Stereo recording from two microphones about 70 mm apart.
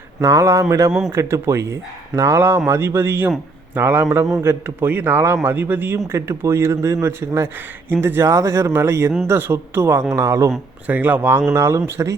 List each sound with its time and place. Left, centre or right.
0.2 s a man's voice: right
6.1 s a man's voice: right
10.8 s a man's voice: right